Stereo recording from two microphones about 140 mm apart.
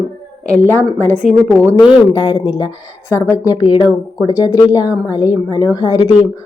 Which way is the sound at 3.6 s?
40° left (ahead or behind).